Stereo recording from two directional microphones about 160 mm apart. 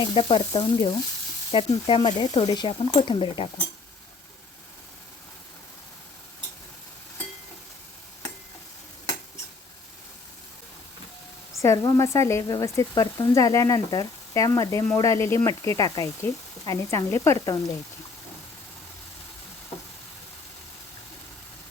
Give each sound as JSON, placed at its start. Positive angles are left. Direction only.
{"t": 0.0, "sound": "speech", "side_deg": 35}
{"t": 11.6, "sound": "speech", "side_deg": 20}